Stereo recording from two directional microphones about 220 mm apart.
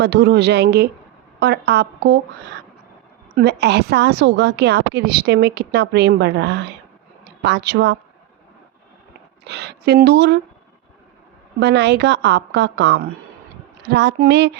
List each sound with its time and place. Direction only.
0.0 s a woman's voice: 50° right (ahead or behind)
3.3 s a woman's voice: 50° right (ahead or behind)
9.4 s a woman's voice: 50° right (ahead or behind)
11.6 s a woman's voice: 50° right (ahead or behind)